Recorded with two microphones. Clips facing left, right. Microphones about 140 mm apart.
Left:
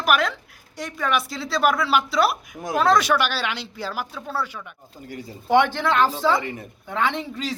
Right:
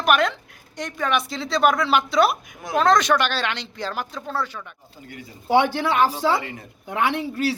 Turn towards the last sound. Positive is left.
turn(degrees=-10)  # may be behind; listen again after turning